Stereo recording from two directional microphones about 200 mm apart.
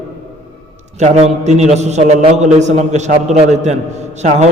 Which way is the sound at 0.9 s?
35° right (ahead or behind).